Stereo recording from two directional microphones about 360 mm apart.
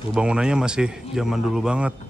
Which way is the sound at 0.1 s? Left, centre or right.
Centre.